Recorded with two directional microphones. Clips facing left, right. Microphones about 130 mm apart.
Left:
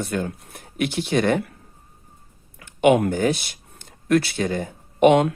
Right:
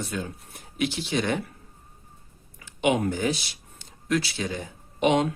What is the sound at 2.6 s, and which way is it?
Speech, 55° left (ahead or behind).